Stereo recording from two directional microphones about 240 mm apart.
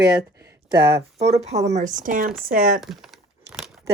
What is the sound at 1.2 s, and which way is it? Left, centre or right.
Speech, right.